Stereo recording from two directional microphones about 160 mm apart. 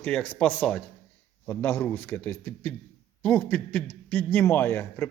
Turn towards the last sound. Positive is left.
turn(degrees=15)  # may be behind; listen again after turning